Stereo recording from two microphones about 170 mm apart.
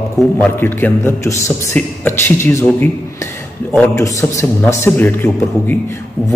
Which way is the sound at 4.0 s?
15° left (ahead or behind).